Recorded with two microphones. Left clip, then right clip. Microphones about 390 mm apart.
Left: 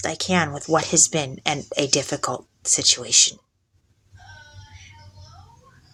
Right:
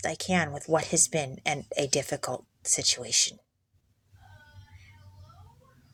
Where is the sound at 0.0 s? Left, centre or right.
Right.